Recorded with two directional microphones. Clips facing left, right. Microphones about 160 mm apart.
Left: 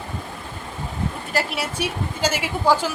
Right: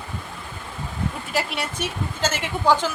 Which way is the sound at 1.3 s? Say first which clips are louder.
Left 2 dB; 5° left (ahead or behind).